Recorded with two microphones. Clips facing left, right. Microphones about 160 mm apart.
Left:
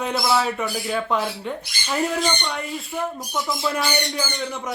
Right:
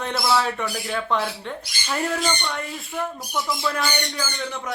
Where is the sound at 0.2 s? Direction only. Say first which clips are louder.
Right 1 dB; 10° left (ahead or behind).